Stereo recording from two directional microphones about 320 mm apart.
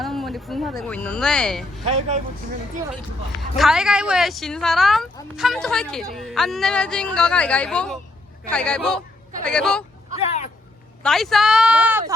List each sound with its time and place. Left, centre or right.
0.0 s speech: centre
1.8 s speech: centre
3.6 s speech: centre
10.2 s a sound: centre
11.0 s speech: centre